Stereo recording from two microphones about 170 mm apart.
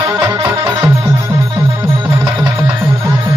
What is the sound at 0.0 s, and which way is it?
Music, 20° right (ahead or behind).